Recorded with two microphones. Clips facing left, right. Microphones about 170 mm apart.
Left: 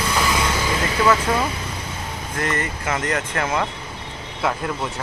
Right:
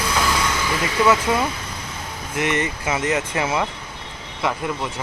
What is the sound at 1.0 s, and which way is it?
Speech, 5° right (ahead or behind).